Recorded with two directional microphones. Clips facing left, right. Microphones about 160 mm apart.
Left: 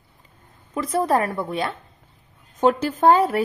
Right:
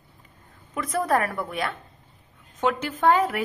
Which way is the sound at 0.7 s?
30° left (ahead or behind).